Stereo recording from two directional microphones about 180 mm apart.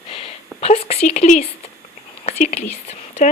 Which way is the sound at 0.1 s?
30° left (ahead or behind).